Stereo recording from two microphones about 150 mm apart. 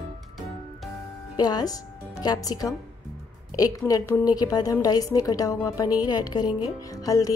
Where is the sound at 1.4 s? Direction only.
25° left (ahead or behind).